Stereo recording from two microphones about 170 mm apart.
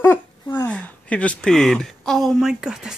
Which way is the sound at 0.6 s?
10° left (ahead or behind).